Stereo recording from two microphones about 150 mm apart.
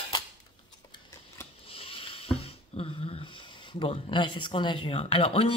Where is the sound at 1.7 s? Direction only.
40° left (ahead or behind).